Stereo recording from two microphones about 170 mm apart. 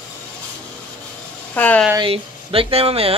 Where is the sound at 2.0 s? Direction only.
35° right (ahead or behind).